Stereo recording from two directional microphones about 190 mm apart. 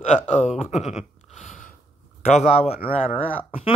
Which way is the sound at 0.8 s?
35° left (ahead or behind).